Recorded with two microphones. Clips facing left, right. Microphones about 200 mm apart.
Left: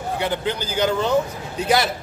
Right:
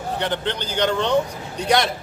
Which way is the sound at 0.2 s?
10° left (ahead or behind).